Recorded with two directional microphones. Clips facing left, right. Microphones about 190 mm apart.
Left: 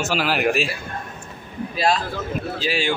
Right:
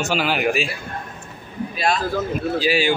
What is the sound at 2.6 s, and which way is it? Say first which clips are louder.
Speech: right 4 dB; 5° right (ahead or behind).